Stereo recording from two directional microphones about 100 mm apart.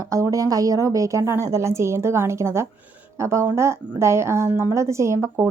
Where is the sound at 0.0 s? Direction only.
35° right (ahead or behind).